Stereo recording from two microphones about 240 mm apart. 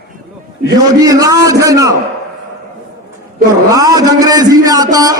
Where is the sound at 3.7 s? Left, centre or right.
Centre.